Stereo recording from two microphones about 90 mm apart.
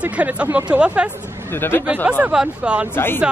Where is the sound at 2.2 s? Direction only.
10° right (ahead or behind).